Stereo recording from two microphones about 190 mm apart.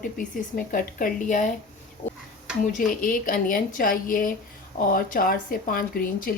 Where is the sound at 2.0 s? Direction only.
30° left (ahead or behind).